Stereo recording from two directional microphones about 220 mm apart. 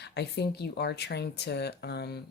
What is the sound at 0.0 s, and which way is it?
Speech, 50° left (ahead or behind).